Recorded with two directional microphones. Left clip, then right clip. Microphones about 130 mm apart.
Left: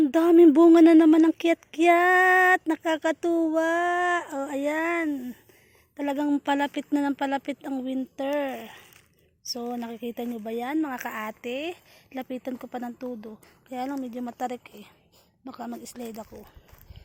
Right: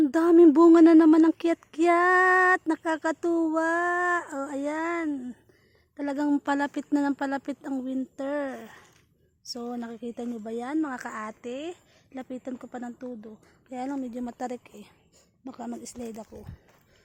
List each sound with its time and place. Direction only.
0.0 s speech: 5° right (ahead or behind)